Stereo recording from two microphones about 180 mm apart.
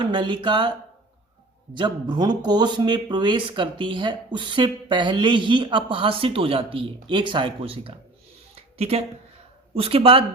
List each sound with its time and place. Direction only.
0.0 s speech: 25° right (ahead or behind)
1.7 s speech: 25° right (ahead or behind)
8.5 s a sound: 35° right (ahead or behind)
9.7 s speech: 30° right (ahead or behind)